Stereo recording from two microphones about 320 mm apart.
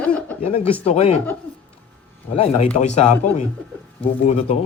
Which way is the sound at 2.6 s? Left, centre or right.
Left.